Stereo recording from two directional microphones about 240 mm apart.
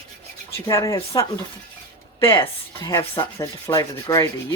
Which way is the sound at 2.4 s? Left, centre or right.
Centre.